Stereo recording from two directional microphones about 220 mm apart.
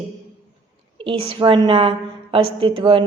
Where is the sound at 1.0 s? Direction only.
25° right (ahead or behind).